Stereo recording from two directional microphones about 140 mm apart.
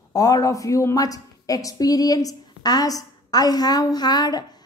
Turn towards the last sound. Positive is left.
turn(degrees=30)  # may be behind; listen again after turning